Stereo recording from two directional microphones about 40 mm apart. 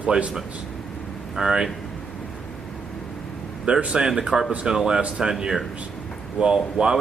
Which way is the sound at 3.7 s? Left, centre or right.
Right.